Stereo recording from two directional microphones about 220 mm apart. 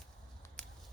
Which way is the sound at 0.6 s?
5° left (ahead or behind).